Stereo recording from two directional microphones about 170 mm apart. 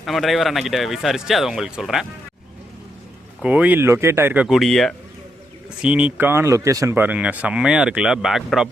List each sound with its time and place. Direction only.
0.0 s speech: centre (ahead or behind)
3.4 s speech: 10° right (ahead or behind)
4.4 s speech: centre (ahead or behind)